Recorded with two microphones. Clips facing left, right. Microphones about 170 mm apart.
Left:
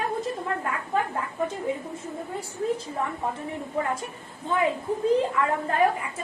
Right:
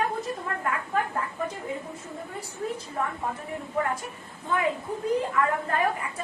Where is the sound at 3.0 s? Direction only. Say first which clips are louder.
Left 1 dB; 20° left (ahead or behind).